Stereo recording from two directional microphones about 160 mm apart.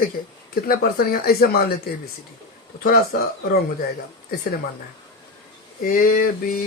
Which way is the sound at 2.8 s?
65° left (ahead or behind).